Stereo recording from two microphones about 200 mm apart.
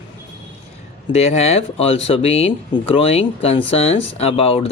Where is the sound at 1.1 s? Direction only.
35° left (ahead or behind).